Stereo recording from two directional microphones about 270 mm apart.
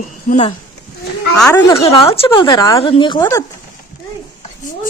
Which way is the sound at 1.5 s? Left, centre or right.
Centre.